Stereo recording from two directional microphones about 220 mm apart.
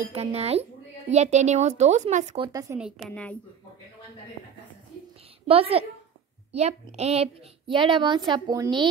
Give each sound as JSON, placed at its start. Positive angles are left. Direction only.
{"t": 0.0, "sound": "a woman's voice", "side_deg": -25}
{"t": 3.1, "sound": "speech", "side_deg": 5}
{"t": 5.5, "sound": "a woman's voice", "side_deg": -25}